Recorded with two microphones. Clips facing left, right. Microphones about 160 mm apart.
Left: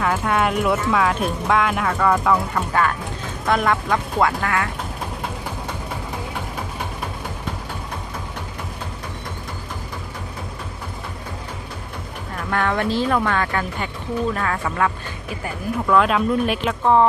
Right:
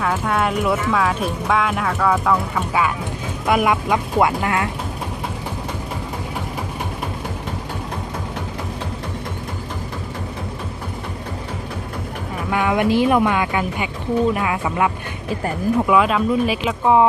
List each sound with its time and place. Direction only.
0.0 s speech: centre (ahead or behind); by 4.7 s 20° right (ahead or behind)
12.5 s speech: 10° right (ahead or behind)
15.9 s speech: centre (ahead or behind)